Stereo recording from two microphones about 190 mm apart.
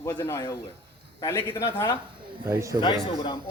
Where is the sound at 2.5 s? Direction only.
15° right (ahead or behind).